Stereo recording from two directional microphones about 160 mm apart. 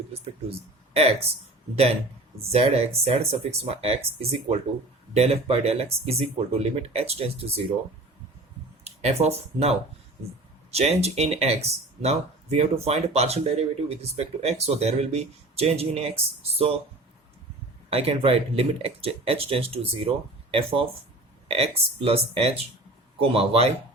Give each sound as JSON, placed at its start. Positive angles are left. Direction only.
{"t": 0.9, "sound": "speech", "side_deg": -40}
{"t": 2.5, "sound": "speech", "side_deg": -40}
{"t": 8.8, "sound": "speech", "side_deg": -40}
{"t": 17.8, "sound": "speech", "side_deg": -40}